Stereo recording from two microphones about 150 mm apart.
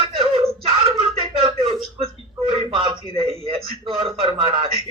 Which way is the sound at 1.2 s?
40° right (ahead or behind).